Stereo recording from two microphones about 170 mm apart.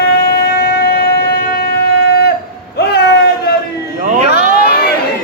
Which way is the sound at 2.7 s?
70° left (ahead or behind).